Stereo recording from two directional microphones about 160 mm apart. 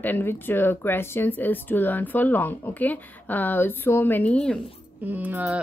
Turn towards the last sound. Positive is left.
turn(degrees=-10)  # may be behind; listen again after turning